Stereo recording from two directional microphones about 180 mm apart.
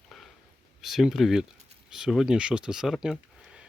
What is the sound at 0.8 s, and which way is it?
Speech, centre (ahead or behind).